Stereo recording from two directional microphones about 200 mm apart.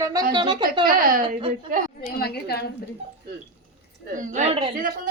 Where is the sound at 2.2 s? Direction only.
50° left (ahead or behind).